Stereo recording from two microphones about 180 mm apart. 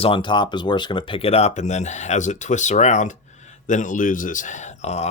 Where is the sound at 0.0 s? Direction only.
25° left (ahead or behind).